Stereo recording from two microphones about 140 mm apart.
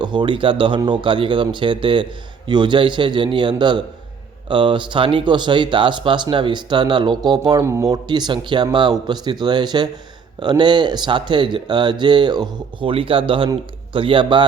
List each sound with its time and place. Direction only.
0.0 s speech: 35° right (ahead or behind)